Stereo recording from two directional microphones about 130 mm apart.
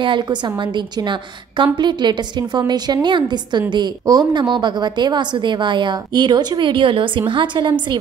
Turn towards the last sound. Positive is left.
turn(degrees=-40)  # may be behind; listen again after turning